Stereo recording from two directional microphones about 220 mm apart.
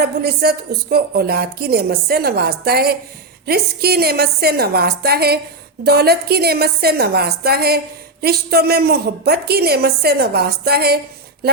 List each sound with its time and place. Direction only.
0.0 s a woman's voice: 45° right (ahead or behind)